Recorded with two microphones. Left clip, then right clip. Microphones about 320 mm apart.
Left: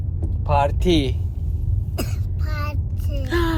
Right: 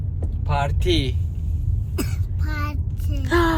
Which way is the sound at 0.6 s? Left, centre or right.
Left.